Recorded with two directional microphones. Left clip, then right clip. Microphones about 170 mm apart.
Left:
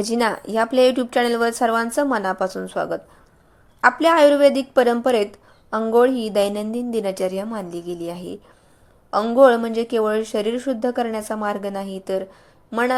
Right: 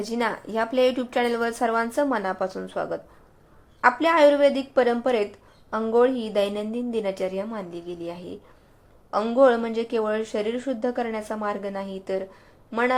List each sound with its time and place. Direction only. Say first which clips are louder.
0.0 s a woman's voice: left 6 dB; 35° left (ahead or behind)